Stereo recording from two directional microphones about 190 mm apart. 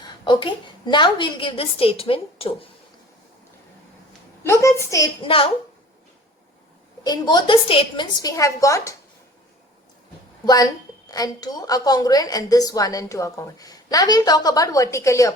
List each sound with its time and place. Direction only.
0.0 s a sound: 25° left (ahead or behind)
0.9 s a woman's voice: 25° left (ahead or behind)
4.4 s a child's voice: 15° left (ahead or behind)
7.0 s a woman's voice: 20° left (ahead or behind)
10.4 s a woman's voice: 20° left (ahead or behind)